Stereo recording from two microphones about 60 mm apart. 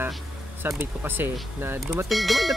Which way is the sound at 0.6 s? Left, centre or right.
Right.